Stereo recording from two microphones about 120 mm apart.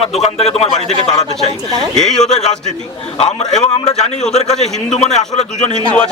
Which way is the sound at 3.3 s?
65° left (ahead or behind).